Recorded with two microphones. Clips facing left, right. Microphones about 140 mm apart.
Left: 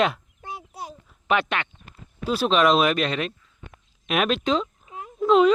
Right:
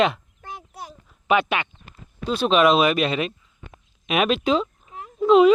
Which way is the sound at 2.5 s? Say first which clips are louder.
Right 2 dB; 5° right (ahead or behind).